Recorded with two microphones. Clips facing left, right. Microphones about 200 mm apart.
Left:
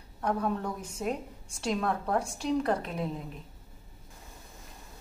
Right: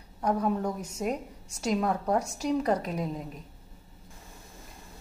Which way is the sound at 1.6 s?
15° right (ahead or behind).